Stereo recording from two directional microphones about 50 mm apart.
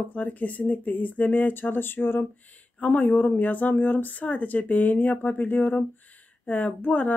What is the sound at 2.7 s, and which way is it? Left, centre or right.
Speech, left.